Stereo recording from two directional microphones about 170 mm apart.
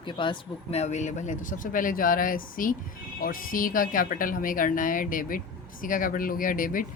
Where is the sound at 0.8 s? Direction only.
45° left (ahead or behind).